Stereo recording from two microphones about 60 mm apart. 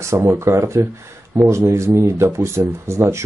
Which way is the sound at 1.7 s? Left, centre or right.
Right.